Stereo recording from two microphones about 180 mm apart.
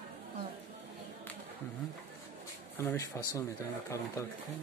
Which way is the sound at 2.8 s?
15° left (ahead or behind).